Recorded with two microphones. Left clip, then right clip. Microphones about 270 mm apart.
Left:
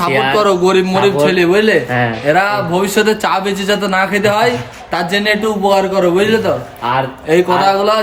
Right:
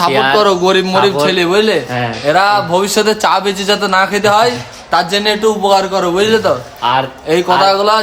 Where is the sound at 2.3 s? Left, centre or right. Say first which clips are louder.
Right 4 dB; centre.